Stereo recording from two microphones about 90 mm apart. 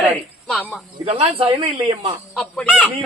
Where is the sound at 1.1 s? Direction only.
90° right.